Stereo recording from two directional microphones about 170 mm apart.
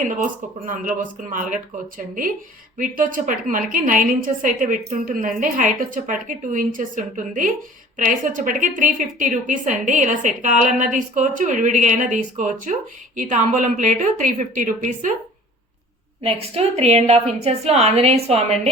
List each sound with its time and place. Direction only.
0.0 s a woman's voice: 50° right (ahead or behind)
2.7 s a woman's voice: 50° right (ahead or behind)
16.2 s a woman's voice: 35° right (ahead or behind)